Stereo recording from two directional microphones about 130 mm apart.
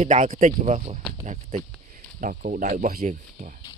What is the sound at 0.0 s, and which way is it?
Speech, 75° right (ahead or behind).